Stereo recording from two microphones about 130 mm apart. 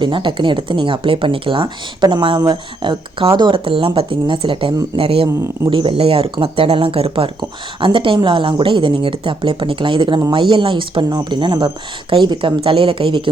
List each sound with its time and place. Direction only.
0.0 s speech: 40° right (ahead or behind)
5.3 s speech: 20° right (ahead or behind)
5.7 s speech: 40° right (ahead or behind)